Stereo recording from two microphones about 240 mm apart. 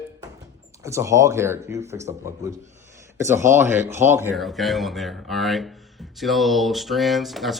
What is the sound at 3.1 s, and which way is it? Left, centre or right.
A man's voice, centre.